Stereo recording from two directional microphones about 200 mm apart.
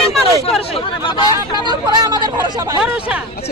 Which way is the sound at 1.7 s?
20° right (ahead or behind).